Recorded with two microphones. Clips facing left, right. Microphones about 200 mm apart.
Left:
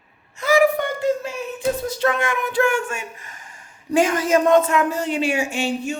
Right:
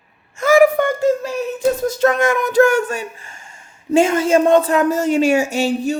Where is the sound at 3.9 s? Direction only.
25° right (ahead or behind).